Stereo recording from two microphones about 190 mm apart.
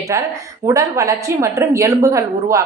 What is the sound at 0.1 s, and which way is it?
A woman's voice, 15° right (ahead or behind).